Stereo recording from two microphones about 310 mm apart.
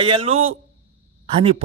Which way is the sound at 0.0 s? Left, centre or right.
Centre.